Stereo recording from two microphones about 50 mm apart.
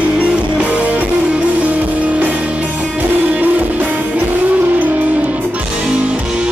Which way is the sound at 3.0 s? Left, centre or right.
Right.